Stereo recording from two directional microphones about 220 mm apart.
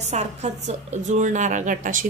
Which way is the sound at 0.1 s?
30° right (ahead or behind).